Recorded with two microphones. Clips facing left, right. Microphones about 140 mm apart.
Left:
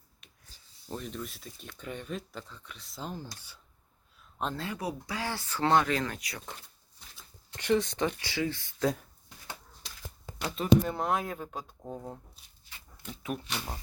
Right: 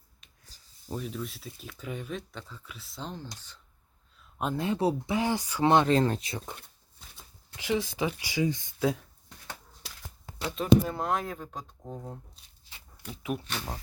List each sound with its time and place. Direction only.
0.2 s a sound: centre (ahead or behind)
0.9 s speech: 5° right (ahead or behind)
4.4 s speech: 10° right (ahead or behind)
4.6 s speech: 25° right (ahead or behind)
7.5 s speech: 5° right (ahead or behind)
8.8 s speech: centre (ahead or behind)
10.5 s speech: centre (ahead or behind)
13.1 s speech: 5° right (ahead or behind)